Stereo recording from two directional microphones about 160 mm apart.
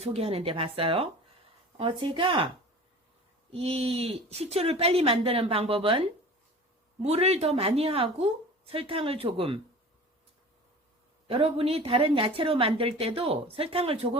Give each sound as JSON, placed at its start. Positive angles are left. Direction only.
{"t": 0.0, "sound": "a woman's voice", "side_deg": -40}
{"t": 3.5, "sound": "a woman's voice", "side_deg": -40}
{"t": 11.3, "sound": "a woman's voice", "side_deg": -35}